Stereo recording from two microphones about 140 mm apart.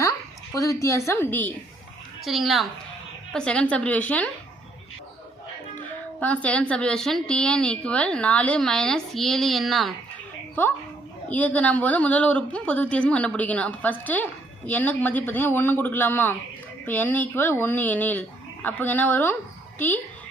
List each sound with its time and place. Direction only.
0.5 s a woman's voice: 20° left (ahead or behind)
2.2 s a woman's voice: centre (ahead or behind)
6.1 s a woman's voice: 10° left (ahead or behind)
11.3 s a woman's voice: 10° left (ahead or behind)